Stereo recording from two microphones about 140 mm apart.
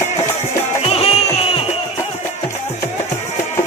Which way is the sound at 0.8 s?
45° left (ahead or behind).